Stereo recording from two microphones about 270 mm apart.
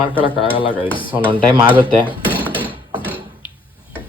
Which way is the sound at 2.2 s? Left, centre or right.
Centre.